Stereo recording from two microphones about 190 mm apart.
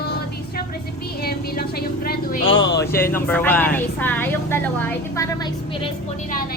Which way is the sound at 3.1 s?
10° left (ahead or behind).